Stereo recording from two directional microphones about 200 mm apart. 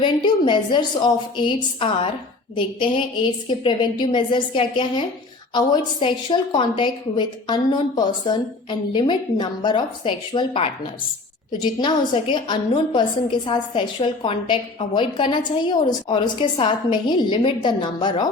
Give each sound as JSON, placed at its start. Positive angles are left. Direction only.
{"t": 0.0, "sound": "a woman's voice", "side_deg": 25}
{"t": 2.6, "sound": "a woman's voice", "side_deg": 25}